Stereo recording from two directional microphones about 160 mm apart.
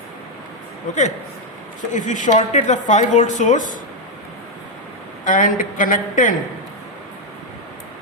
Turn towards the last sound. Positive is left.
turn(degrees=55)  # may be behind; listen again after turning